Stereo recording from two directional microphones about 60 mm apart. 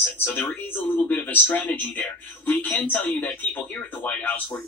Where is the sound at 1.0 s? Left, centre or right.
Left.